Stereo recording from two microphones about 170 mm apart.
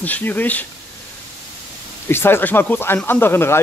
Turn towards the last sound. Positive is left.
turn(degrees=15)  # may be behind; listen again after turning